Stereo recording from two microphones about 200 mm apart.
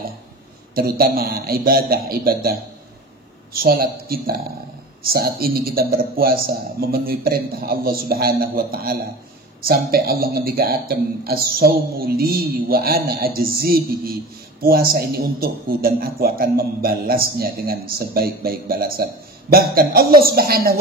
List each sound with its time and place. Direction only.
0.7 s speech: 50° right (ahead or behind)